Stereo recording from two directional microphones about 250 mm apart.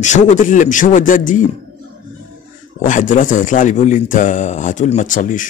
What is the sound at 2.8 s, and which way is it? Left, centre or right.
Speech, left.